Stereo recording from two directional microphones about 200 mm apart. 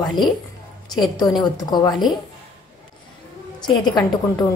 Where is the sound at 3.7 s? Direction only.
20° left (ahead or behind).